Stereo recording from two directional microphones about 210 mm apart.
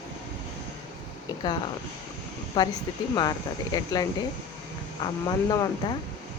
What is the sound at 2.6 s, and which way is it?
Speech, 20° left (ahead or behind).